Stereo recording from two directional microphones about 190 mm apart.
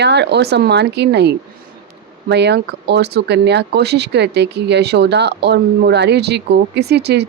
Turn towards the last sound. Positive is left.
turn(degrees=-60)  # may be behind; listen again after turning